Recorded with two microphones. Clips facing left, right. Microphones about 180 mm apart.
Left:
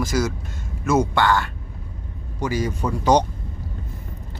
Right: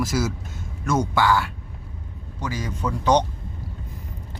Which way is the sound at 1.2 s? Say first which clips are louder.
Left 1 dB; 10° right (ahead or behind).